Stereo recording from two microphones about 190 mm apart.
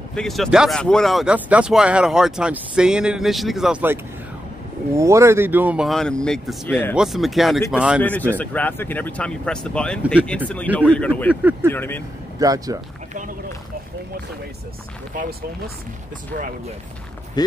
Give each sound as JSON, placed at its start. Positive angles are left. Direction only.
{"t": 0.1, "sound": "speech", "side_deg": 5}
{"t": 7.0, "sound": "speech", "side_deg": 0}
{"t": 8.0, "sound": "speech", "side_deg": 10}
{"t": 12.4, "sound": "speech", "side_deg": -20}